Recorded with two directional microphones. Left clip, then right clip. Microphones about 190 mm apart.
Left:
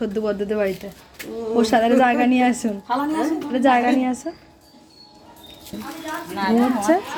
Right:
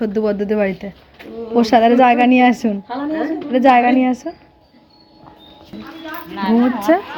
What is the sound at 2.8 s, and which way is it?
Speech, 70° left (ahead or behind).